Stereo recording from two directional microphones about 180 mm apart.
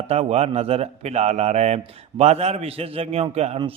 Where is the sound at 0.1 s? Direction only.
35° right (ahead or behind).